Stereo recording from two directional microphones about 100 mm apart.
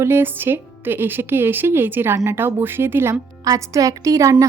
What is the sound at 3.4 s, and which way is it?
A woman's voice, 35° right (ahead or behind).